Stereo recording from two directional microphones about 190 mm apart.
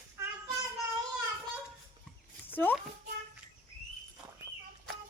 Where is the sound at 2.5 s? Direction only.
10° left (ahead or behind).